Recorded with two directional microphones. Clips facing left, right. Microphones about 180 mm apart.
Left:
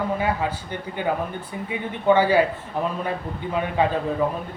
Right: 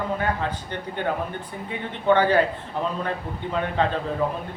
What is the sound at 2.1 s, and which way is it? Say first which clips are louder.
Speech: left 1 dB; 10° left (ahead or behind).